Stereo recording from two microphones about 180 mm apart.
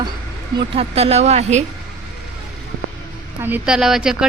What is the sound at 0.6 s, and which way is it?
Speech, 30° right (ahead or behind).